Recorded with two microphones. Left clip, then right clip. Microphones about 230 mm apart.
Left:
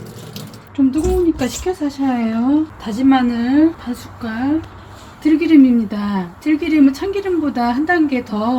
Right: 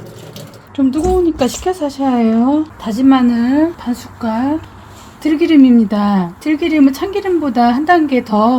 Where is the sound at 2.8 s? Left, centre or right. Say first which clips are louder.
Right 5 dB; right.